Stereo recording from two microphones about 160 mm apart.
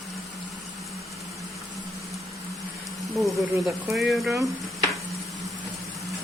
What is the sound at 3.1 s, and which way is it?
Speech, centre (ahead or behind).